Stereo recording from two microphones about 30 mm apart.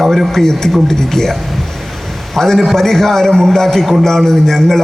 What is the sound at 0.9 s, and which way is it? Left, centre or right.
Speech, centre.